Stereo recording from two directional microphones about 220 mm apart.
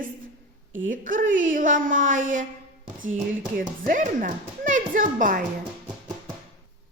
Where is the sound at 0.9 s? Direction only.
35° right (ahead or behind).